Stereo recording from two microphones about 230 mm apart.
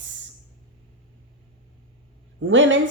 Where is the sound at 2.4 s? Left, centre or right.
Right.